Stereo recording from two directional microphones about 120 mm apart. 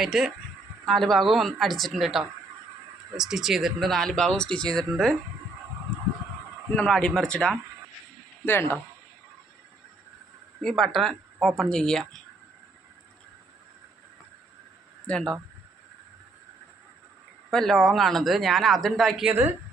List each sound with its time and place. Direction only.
0.0 s speech: centre (ahead or behind)
6.7 s speech: 5° left (ahead or behind)
10.6 s speech: 5° left (ahead or behind)
15.0 s speech: 5° left (ahead or behind)
17.5 s speech: 5° left (ahead or behind)
19.2 s a woman's voice: 15° right (ahead or behind)